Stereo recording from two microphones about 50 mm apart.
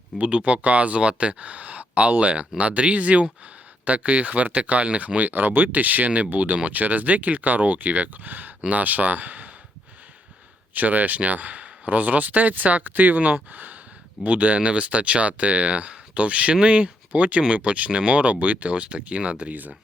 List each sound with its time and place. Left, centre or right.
0.2 s speech: right
10.8 s speech: right